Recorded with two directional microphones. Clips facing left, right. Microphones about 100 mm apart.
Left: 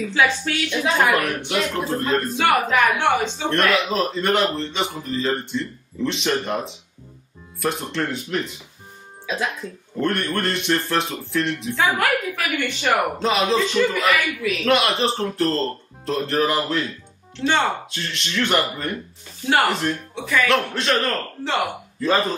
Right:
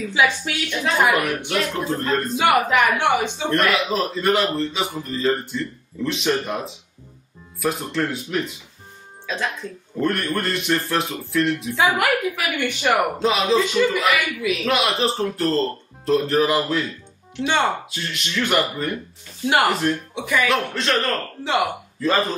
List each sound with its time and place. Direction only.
0.1 s speech: 10° right (ahead or behind)
3.0 s speech: 15° right (ahead or behind)
3.4 s speech: centre (ahead or behind)
9.2 s speech: 10° left (ahead or behind); by 13.0 s 15° right (ahead or behind)
13.2 s speech: centre (ahead or behind)
17.4 s speech: 15° right (ahead or behind)
17.9 s speech: 5° right (ahead or behind)
19.4 s speech: 15° right (ahead or behind)
19.7 s speech: centre (ahead or behind)
20.2 s speech: 15° right (ahead or behind)
20.4 s speech: centre (ahead or behind)